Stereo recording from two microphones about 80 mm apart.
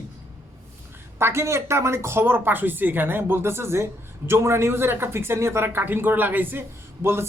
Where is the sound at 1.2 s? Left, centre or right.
Right.